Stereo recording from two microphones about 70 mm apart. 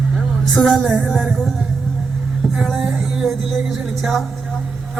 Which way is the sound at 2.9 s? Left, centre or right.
Centre.